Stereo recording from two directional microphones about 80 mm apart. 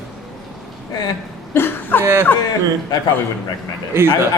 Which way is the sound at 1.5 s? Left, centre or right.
Left.